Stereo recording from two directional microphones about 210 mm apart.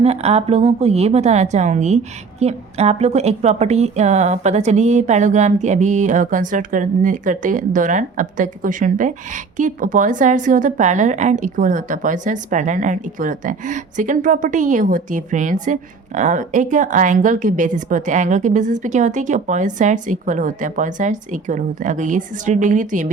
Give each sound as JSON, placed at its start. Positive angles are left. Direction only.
{"t": 0.0, "sound": "a woman's voice", "side_deg": -30}